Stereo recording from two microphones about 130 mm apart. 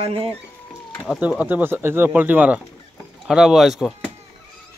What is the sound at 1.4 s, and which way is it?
Speech, 15° right (ahead or behind).